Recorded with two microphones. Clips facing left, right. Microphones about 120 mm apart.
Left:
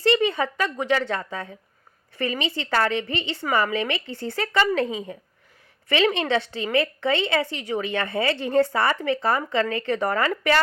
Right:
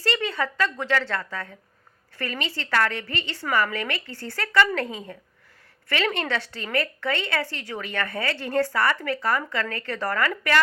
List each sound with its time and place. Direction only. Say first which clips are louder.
0.0 s a woman's voice: left 6 dB; 20° left (ahead or behind)